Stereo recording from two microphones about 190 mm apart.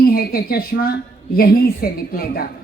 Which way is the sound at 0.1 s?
50° left (ahead or behind).